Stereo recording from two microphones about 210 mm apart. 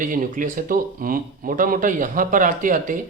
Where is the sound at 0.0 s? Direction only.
40° right (ahead or behind).